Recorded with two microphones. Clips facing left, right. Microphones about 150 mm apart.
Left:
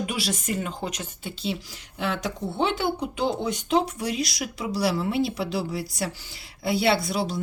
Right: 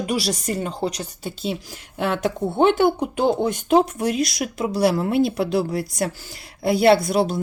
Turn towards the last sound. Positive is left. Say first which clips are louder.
# right 7 dB
turn(degrees=-50)  # may be behind; listen again after turning